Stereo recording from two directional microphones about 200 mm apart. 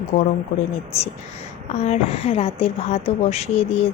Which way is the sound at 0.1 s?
40° left (ahead or behind).